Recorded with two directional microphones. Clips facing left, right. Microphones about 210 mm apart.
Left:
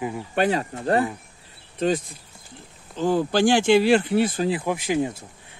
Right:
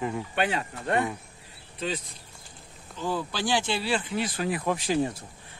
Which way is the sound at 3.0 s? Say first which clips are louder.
Left 10 dB; 50° left (ahead or behind).